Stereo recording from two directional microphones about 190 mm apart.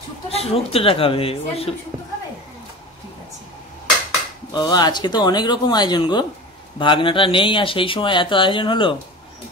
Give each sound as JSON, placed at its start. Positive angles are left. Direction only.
{"t": 0.3, "sound": "speech", "side_deg": 30}
{"t": 4.5, "sound": "speech", "side_deg": 20}